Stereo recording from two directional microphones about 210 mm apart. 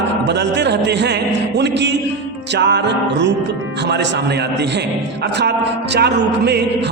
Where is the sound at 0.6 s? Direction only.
55° right (ahead or behind).